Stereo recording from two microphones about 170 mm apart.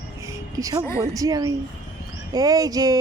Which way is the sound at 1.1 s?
20° right (ahead or behind).